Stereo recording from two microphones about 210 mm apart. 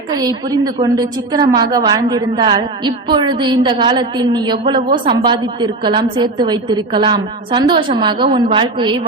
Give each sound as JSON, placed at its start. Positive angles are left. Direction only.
{"t": 0.1, "sound": "a woman's voice", "side_deg": -20}